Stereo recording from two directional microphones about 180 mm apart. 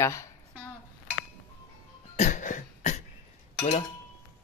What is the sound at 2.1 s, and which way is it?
Cough, 45° left (ahead or behind).